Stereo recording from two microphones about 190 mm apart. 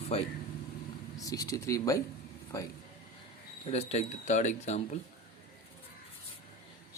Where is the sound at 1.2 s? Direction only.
20° left (ahead or behind).